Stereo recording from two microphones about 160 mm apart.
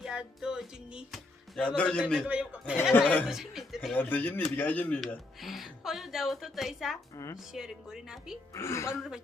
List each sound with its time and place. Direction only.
0.0 s speech: 5° right (ahead or behind)
2.1 s a man's voice: 5° right (ahead or behind)
3.0 s speech: 10° left (ahead or behind)
3.2 s speech: centre (ahead or behind)
3.9 s speech: 10° left (ahead or behind)
8.5 s speech: 15° left (ahead or behind)
8.9 s speech: 5° right (ahead or behind)